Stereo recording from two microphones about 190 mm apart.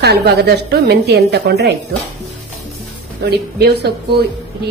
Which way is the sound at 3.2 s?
60° right (ahead or behind).